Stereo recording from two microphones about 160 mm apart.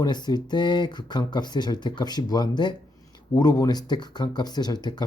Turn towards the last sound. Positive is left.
turn(degrees=25)  # may be behind; listen again after turning